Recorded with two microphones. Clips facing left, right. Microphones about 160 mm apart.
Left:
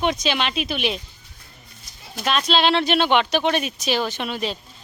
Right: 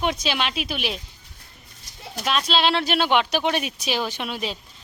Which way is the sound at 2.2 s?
Centre (ahead or behind).